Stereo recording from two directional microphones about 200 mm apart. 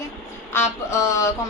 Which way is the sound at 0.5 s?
15° left (ahead or behind).